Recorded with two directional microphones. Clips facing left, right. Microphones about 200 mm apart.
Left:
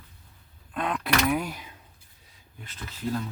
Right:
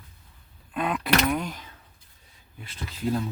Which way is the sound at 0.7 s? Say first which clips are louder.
Right 2 dB; 5° right (ahead or behind).